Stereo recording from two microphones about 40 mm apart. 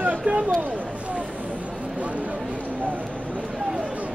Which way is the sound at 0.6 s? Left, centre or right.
Right.